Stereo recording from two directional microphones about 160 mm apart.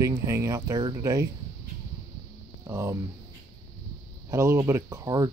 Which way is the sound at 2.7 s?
15° right (ahead or behind).